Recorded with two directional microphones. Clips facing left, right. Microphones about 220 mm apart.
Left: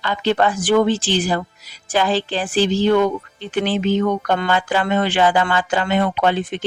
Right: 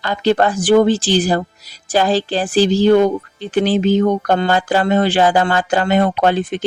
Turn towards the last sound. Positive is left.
turn(degrees=-40)  # may be behind; listen again after turning